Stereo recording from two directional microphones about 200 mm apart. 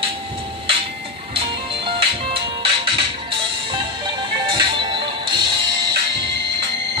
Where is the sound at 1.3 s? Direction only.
25° right (ahead or behind).